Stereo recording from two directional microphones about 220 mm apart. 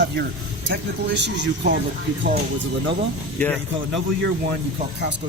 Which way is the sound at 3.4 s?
5° left (ahead or behind).